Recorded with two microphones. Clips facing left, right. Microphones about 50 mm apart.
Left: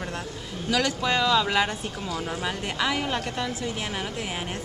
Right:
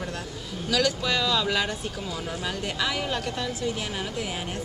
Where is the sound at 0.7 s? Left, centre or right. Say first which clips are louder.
Left 1 dB; left.